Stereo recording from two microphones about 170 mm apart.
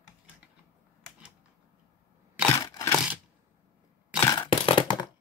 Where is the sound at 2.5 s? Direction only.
20° left (ahead or behind).